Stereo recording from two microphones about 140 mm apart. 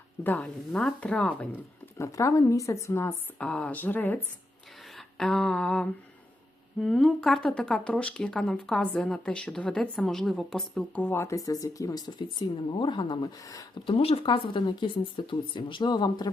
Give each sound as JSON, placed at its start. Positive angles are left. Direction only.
{"t": 0.3, "sound": "speech", "side_deg": 10}
{"t": 2.0, "sound": "speech", "side_deg": 20}
{"t": 4.9, "sound": "a sound", "side_deg": 0}
{"t": 6.7, "sound": "speech", "side_deg": 5}
{"t": 13.8, "sound": "speech", "side_deg": 45}